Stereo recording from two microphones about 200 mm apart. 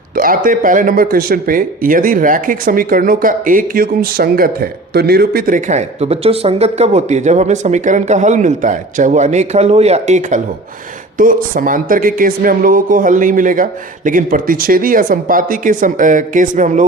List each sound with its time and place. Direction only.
0.2 s speech: 45° right (ahead or behind)